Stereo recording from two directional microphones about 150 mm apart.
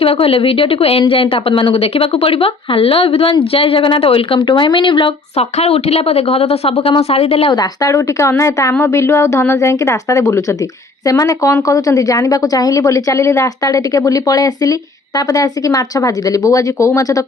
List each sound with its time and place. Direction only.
0.0 s speech: 40° left (ahead or behind)
5.4 s speech: 45° left (ahead or behind)
7.5 s a woman's voice: 25° left (ahead or behind)